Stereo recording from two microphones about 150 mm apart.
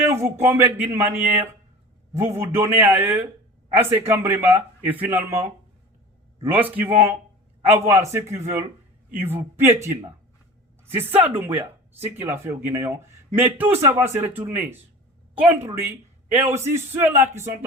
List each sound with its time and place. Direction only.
0.1 s speech: 15° right (ahead or behind)
6.4 s speech: 10° right (ahead or behind)
10.9 s speech: 10° right (ahead or behind)